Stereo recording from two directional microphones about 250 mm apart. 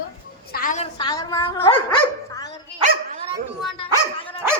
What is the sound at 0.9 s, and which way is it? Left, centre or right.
Speech, centre.